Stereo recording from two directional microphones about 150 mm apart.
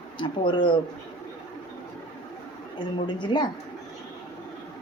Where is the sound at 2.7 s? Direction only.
30° left (ahead or behind).